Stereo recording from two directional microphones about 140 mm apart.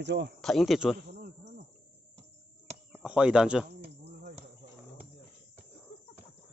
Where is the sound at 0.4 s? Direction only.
Centre (ahead or behind).